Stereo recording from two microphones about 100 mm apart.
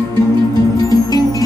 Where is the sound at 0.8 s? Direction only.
40° left (ahead or behind).